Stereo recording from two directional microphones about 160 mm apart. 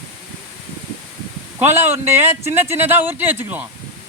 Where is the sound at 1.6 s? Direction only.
15° right (ahead or behind).